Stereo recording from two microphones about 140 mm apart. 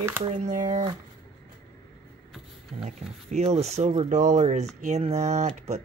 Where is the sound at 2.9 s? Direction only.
50° right (ahead or behind).